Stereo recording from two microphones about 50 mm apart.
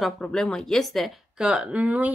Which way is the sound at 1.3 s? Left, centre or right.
Centre.